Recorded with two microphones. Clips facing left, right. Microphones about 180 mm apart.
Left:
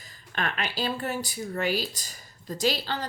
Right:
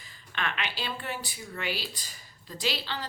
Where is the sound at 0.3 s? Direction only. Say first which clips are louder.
Left 4 dB; 40° left (ahead or behind).